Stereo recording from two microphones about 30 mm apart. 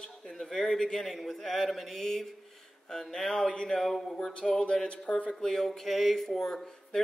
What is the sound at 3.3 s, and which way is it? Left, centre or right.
Speech, left.